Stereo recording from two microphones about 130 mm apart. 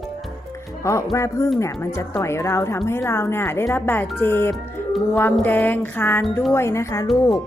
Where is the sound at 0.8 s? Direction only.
20° left (ahead or behind).